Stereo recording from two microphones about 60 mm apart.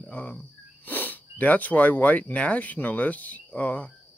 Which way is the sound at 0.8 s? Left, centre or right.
Left.